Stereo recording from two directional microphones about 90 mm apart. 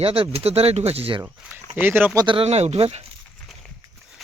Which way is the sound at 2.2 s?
80° right.